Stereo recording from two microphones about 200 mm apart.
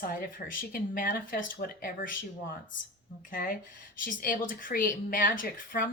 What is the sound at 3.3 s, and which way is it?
A woman's voice, 45° left (ahead or behind).